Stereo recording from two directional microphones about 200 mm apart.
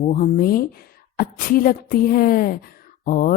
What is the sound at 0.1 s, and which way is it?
A woman's voice, 45° left (ahead or behind).